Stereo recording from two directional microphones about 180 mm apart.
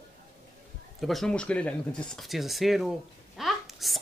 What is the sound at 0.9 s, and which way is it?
A child's voice, centre (ahead or behind).